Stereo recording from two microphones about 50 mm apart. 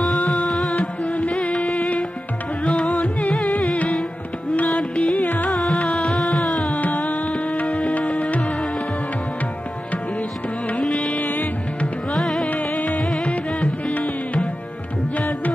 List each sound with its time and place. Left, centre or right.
0.0 s music: centre
0.7 s music: centre
1.2 s music: left
1.5 s music: centre
2.6 s music: left
3.7 s music: left
5.2 s music: left
5.5 s music: centre
6.9 s carnatic music: left
7.5 s music: left
10.8 s music: centre
12.2 s music: centre
12.5 s music: left